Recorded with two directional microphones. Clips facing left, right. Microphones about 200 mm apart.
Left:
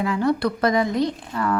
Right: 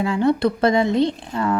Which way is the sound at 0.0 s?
25° right (ahead or behind).